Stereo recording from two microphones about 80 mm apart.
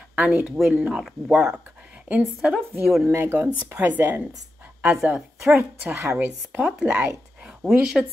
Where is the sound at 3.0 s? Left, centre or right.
Right.